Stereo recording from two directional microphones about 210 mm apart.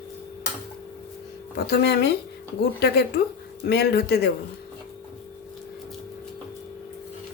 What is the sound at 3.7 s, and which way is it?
Speech, 50° left (ahead or behind).